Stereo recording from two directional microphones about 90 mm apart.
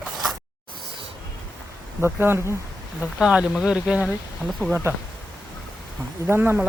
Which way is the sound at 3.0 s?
10° right (ahead or behind).